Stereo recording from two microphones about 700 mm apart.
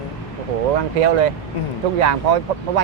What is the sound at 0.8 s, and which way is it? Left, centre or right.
Speech, right.